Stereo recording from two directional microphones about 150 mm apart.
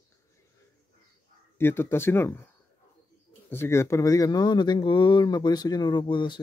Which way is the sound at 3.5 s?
15° left (ahead or behind).